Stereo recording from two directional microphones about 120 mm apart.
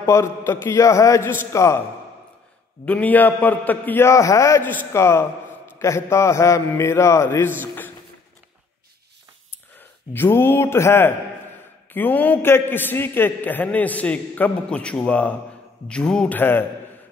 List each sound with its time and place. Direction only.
0.0 s mantra: 25° left (ahead or behind)
2.8 s a man's voice: 15° left (ahead or behind)
5.8 s mantra: 25° left (ahead or behind)
9.8 s a man's voice: 15° left (ahead or behind)